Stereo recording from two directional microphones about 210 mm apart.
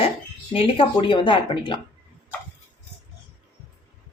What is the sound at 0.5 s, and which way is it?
A man's voice, 25° left (ahead or behind).